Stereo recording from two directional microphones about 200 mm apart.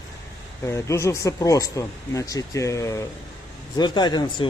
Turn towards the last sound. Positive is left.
turn(degrees=20)  # may be behind; listen again after turning